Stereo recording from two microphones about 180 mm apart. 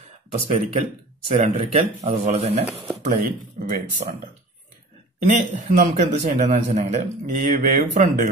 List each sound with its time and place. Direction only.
0.3 s a man's voice: 40° right (ahead or behind)
5.3 s a man's voice: 40° right (ahead or behind)